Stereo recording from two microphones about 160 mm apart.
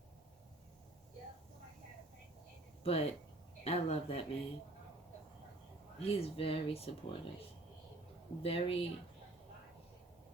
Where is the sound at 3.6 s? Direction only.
40° left (ahead or behind).